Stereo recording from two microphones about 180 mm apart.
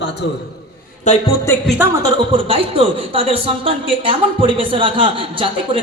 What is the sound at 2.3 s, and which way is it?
A man's voice, 30° right (ahead or behind).